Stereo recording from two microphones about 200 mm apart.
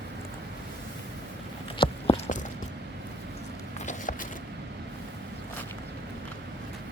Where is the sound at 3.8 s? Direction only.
40° left (ahead or behind).